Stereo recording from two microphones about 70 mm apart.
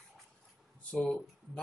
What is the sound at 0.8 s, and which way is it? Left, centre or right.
Speech, centre.